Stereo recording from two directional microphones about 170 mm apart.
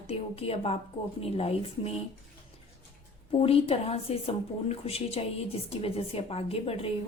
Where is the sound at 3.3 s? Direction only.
35° left (ahead or behind).